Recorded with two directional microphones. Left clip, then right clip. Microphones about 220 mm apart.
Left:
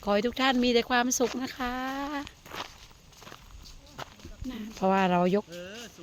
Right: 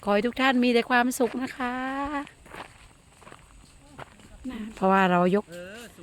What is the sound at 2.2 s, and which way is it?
Walk, 10° left (ahead or behind).